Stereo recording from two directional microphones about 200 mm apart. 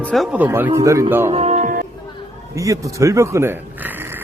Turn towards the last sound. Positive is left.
turn(degrees=-10)  # may be behind; listen again after turning